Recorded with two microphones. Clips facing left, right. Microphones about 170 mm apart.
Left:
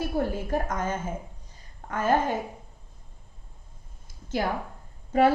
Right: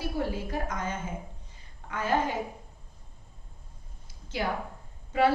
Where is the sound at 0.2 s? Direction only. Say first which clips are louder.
Left 3 dB; 50° left (ahead or behind).